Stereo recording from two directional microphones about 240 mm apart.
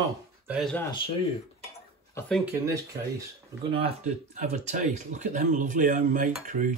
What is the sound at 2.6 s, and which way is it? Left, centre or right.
Speech, centre.